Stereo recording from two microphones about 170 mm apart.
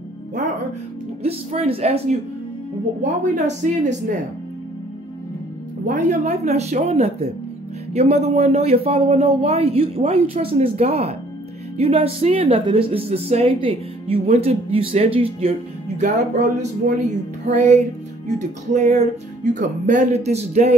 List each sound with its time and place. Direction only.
1.2 s speech: 35° right (ahead or behind)
3.0 s music: 45° right (ahead or behind)
5.9 s speech: 45° right (ahead or behind)
16.0 s music: 45° right (ahead or behind)